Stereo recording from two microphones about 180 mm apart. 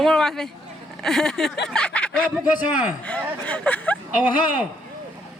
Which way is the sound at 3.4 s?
5° left (ahead or behind).